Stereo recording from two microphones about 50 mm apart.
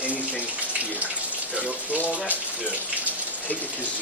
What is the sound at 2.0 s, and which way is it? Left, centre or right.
Speech, left.